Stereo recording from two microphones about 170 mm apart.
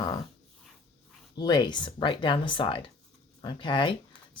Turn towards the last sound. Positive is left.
turn(degrees=25)  # may be behind; listen again after turning